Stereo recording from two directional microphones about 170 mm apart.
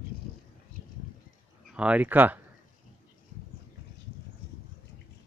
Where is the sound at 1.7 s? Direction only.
5° right (ahead or behind).